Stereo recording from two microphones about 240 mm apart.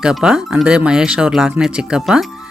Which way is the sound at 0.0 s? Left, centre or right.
Centre.